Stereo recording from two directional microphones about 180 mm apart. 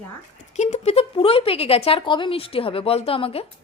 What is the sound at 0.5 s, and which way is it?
A woman's voice, 40° left (ahead or behind).